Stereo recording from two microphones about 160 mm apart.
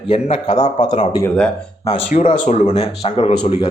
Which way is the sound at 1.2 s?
5° left (ahead or behind).